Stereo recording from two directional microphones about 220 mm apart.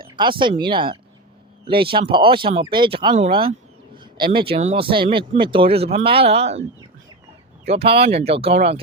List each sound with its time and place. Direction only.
0.2 s speech: 20° right (ahead or behind)